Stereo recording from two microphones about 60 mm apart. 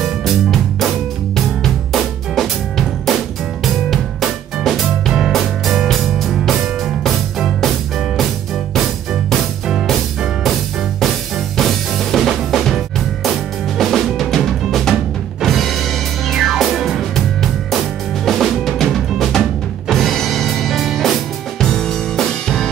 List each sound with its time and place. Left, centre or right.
0.0 s music: centre
3.6 s music: centre
8.7 s music: centre
13.2 s drum kit: centre
15.4 s music: centre
17.4 s drum kit: centre
19.9 s music: centre